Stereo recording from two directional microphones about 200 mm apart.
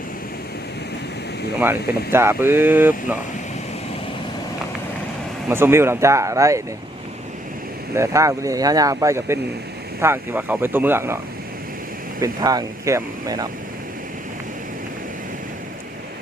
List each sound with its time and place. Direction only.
1.5 s speech: 10° right (ahead or behind)
5.5 s speech: 10° right (ahead or behind)
7.9 s speech: 15° right (ahead or behind)
12.2 s speech: 20° right (ahead or behind)